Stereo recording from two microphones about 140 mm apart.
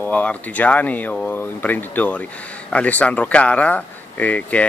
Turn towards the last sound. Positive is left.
turn(degrees=10)  # may be behind; listen again after turning